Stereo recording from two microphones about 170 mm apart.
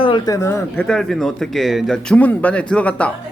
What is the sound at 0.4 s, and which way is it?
A man's voice, 10° left (ahead or behind).